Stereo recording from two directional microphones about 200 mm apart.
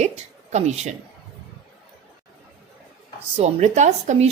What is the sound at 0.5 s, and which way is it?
Speech, 35° right (ahead or behind).